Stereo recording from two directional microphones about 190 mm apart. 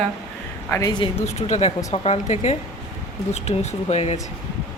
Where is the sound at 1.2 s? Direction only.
35° left (ahead or behind).